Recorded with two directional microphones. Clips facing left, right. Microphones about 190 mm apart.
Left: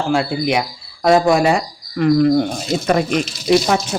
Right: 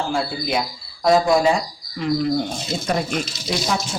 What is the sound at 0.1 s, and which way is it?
Speech, 75° left (ahead or behind).